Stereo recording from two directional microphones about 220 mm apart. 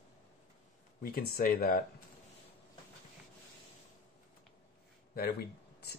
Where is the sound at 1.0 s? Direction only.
40° left (ahead or behind).